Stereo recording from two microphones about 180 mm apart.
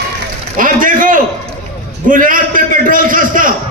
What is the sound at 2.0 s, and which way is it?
A man's voice, 50° right (ahead or behind).